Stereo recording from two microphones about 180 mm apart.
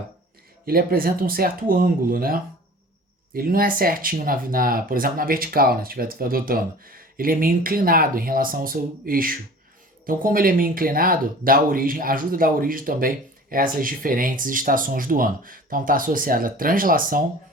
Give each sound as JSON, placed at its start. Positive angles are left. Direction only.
{"t": 0.6, "sound": "speech", "side_deg": -55}